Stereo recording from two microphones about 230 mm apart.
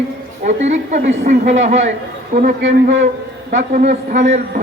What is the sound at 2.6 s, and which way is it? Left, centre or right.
Speech, right.